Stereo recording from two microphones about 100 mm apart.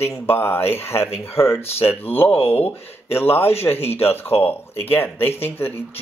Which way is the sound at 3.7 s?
90° left.